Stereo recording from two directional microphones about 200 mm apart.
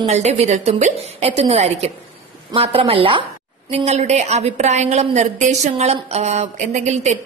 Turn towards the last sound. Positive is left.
turn(degrees=-35)  # may be behind; listen again after turning